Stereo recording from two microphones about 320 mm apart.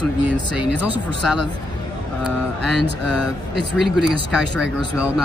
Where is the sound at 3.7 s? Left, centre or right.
Centre.